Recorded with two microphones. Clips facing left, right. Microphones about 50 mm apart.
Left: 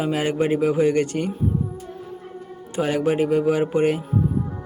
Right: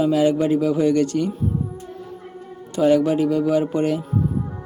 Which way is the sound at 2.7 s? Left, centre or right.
Left.